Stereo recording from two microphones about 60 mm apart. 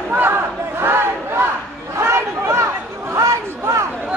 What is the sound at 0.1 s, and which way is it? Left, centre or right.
Battle cry, right.